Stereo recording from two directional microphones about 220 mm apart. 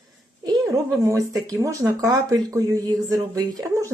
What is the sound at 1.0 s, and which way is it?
Speech, 15° right (ahead or behind).